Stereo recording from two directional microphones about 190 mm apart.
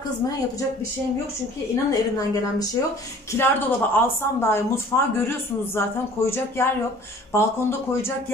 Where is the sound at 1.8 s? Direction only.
20° left (ahead or behind).